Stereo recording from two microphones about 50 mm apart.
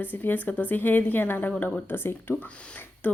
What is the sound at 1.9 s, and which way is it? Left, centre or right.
Speech, left.